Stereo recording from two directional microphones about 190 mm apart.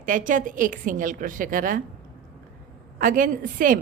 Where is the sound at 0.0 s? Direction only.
45° right (ahead or behind).